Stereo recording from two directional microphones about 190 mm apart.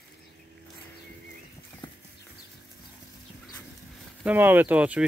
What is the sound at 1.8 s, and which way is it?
Clip-clop, 25° left (ahead or behind).